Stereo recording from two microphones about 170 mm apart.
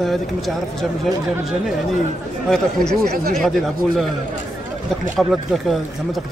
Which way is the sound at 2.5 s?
5° left (ahead or behind).